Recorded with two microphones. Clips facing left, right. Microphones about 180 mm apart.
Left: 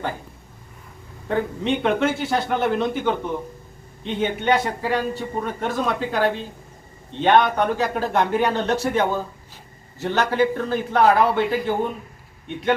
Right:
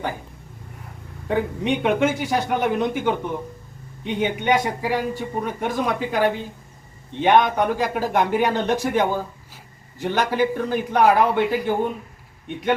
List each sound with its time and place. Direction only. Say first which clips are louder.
1.3 s a man's voice: even; 15° right (ahead or behind)